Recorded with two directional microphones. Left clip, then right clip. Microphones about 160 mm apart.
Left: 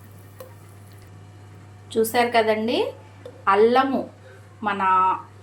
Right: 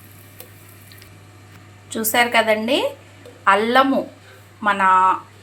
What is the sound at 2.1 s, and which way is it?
A woman's voice, 30° right (ahead or behind).